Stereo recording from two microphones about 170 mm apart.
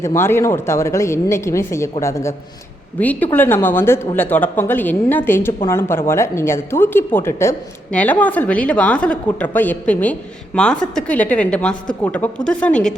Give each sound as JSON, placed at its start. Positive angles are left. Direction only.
{"t": 0.0, "sound": "a woman's voice", "side_deg": 15}